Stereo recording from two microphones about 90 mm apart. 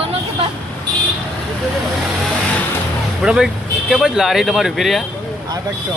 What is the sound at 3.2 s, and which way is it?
Speech, 5° right (ahead or behind).